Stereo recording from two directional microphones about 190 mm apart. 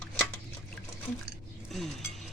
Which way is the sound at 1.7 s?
Centre (ahead or behind).